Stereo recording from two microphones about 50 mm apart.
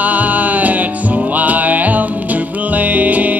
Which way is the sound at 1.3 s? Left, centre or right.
Right.